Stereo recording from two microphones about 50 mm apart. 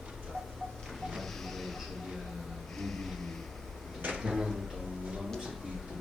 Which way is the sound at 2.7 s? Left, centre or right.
Centre.